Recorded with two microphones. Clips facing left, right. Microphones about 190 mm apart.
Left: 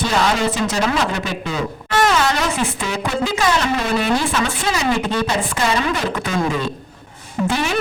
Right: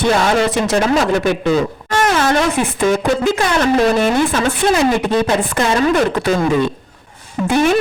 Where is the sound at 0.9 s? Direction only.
55° right (ahead or behind).